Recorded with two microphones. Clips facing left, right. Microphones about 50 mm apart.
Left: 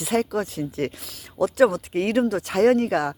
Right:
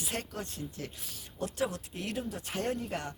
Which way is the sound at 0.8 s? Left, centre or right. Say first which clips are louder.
Left 14 dB; left.